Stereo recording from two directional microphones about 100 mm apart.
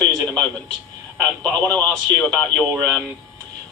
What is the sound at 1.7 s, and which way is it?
Speech, 10° left (ahead or behind).